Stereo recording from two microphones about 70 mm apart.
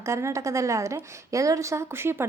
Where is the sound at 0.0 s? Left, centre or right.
Right.